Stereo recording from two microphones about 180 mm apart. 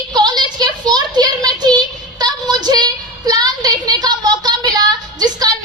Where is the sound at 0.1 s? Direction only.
25° right (ahead or behind).